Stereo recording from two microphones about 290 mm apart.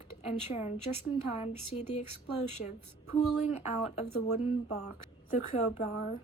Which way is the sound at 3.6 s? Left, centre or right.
Left.